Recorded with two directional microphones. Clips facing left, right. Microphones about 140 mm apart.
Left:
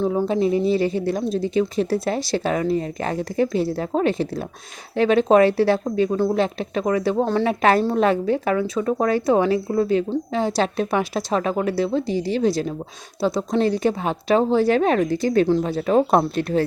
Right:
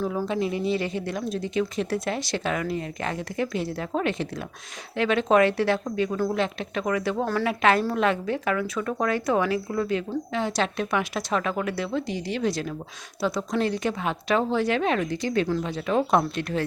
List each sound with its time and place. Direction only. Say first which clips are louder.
0.0 s a woman's voice: left 6 dB; 25° left (ahead or behind)